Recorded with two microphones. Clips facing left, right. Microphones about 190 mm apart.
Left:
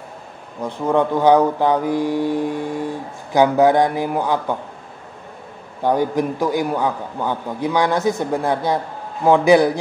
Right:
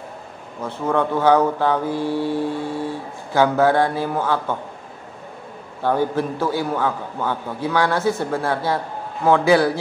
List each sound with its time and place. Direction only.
0.6 s speech: 15° left (ahead or behind)
5.8 s speech: 15° left (ahead or behind)